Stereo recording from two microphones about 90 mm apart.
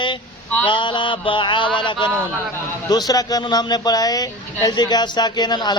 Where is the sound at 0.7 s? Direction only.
65° left (ahead or behind).